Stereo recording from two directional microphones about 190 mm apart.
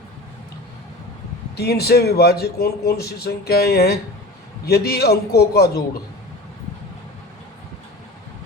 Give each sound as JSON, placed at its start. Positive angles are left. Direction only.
{"t": 1.5, "sound": "a man's voice", "side_deg": 55}